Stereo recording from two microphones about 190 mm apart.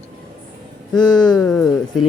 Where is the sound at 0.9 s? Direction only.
20° left (ahead or behind).